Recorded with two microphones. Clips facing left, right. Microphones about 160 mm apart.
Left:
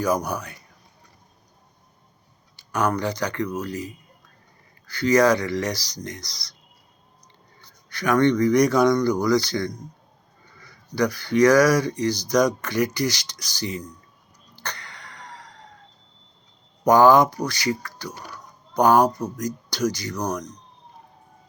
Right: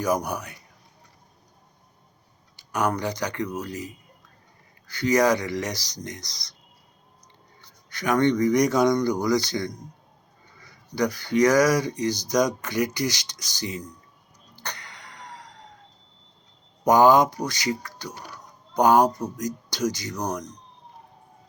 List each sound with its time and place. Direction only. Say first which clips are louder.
0.0 s speech: left 2 dB; 20° right (ahead or behind)
2.6 s speech: left 2 dB; 15° right (ahead or behind)
7.9 s speech: left 2 dB; 20° right (ahead or behind)
14.5 s a sound: left 1 dB; 15° right (ahead or behind)
16.8 s speech: left 2 dB; 20° right (ahead or behind)